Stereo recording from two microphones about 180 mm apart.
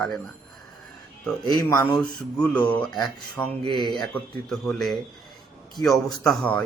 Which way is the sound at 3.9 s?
Centre (ahead or behind).